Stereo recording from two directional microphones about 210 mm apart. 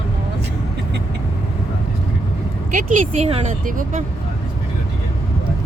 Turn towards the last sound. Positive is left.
turn(degrees=-35)  # may be behind; listen again after turning